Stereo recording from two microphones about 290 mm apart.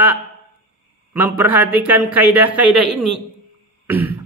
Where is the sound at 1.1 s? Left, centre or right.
Centre.